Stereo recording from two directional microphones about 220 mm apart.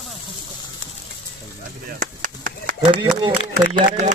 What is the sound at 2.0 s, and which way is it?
Chop, 35° right (ahead or behind).